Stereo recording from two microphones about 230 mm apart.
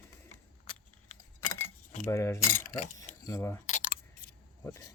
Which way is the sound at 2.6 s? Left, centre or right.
Left.